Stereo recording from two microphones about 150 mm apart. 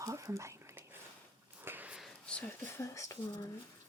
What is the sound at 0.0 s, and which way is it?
Whispering, 20° right (ahead or behind).